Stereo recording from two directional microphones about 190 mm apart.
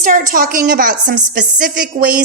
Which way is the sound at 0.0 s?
45° right (ahead or behind).